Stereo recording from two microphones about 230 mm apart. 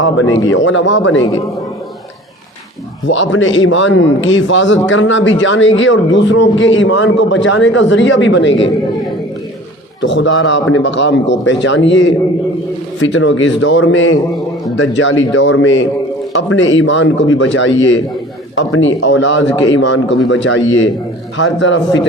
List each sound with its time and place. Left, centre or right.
0.0 s a man's voice: left
3.1 s a man's voice: left
10.0 s a man's voice: left